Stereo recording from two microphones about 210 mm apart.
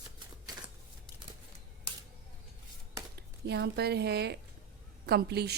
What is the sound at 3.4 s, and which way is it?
Speech, 50° right (ahead or behind).